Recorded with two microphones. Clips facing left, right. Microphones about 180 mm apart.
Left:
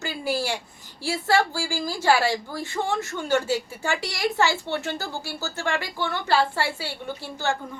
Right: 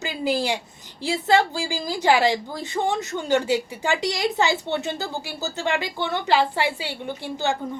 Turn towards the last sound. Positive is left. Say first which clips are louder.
# right 2 dB
turn(degrees=-15)  # may be behind; listen again after turning